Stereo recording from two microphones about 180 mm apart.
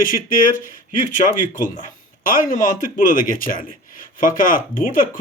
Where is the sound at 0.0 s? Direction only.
50° left (ahead or behind).